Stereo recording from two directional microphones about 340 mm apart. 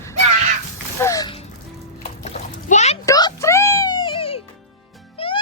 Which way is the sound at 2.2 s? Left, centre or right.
Centre.